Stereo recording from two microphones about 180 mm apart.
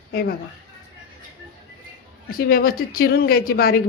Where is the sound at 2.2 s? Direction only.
55° left (ahead or behind).